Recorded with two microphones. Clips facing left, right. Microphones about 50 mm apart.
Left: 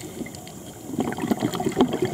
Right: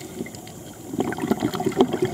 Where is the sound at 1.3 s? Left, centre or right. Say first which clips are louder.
Right 1 dB; centre.